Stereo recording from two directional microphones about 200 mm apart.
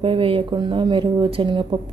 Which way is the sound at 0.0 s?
25° right (ahead or behind).